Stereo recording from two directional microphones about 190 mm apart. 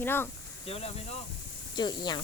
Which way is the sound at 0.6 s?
30° left (ahead or behind).